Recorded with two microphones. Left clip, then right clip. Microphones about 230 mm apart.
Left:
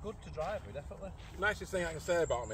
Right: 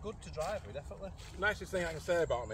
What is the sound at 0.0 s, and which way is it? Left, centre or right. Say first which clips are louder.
Speech: even; right.